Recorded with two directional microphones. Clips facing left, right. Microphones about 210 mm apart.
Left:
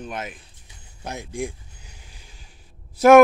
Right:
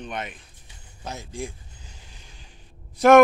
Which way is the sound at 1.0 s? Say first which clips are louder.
Left 4 dB; 15° left (ahead or behind).